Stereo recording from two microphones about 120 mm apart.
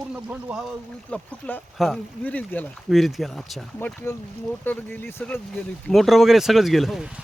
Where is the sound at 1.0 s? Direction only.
10° left (ahead or behind).